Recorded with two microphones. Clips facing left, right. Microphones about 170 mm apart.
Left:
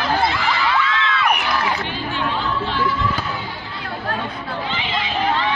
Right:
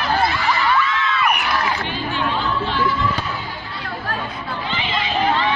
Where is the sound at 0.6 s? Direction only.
90° left.